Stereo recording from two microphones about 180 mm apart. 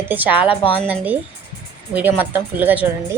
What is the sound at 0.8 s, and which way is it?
A woman's voice, 10° right (ahead or behind).